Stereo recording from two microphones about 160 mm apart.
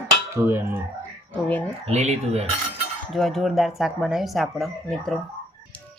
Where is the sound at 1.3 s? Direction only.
10° left (ahead or behind).